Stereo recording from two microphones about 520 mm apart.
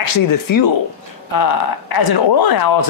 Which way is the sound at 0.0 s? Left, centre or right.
Left.